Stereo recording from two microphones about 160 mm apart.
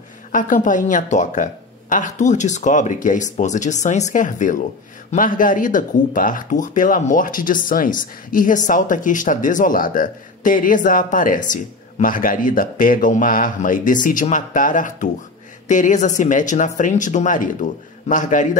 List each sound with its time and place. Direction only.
0.3 s speech: 55° left (ahead or behind)